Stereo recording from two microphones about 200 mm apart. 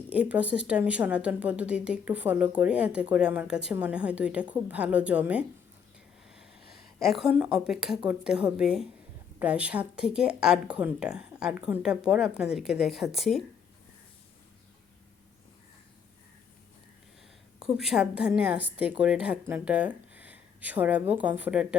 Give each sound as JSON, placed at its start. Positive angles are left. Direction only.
{"t": 0.1, "sound": "a woman's voice", "side_deg": -5}
{"t": 17.6, "sound": "a woman's voice", "side_deg": 0}